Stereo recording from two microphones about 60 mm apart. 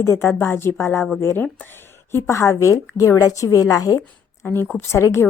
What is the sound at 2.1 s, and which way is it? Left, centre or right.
A woman's voice, left.